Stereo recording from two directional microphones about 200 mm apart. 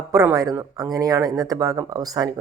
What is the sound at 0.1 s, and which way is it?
Speech, 15° right (ahead or behind).